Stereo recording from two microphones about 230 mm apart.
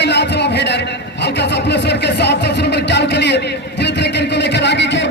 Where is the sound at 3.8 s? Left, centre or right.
Left.